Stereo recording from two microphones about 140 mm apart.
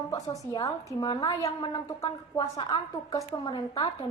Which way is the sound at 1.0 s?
30° left (ahead or behind).